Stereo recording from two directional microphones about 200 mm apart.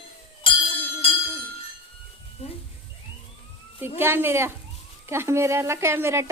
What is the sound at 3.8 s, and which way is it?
A woman's voice, 10° right (ahead or behind).